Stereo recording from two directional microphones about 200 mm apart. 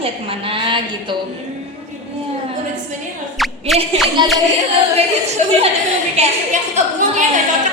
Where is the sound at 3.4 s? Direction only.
Centre (ahead or behind).